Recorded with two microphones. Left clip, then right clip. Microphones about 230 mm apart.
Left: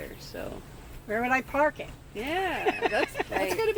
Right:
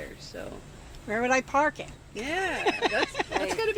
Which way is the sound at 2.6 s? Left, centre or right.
Right.